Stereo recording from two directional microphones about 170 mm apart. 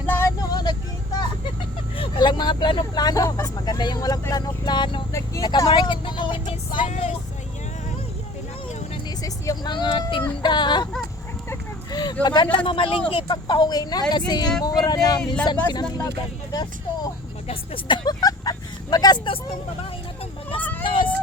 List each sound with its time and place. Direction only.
0.5 s vehicle: 25° left (ahead or behind)
2.0 s speech: 25° left (ahead or behind)
9.0 s speech: 20° left (ahead or behind)
11.4 s a sound: 25° left (ahead or behind)
12.2 s speech: 25° left (ahead or behind)
20.6 s vehicle: 10° left (ahead or behind)
20.8 s a sound: 30° left (ahead or behind)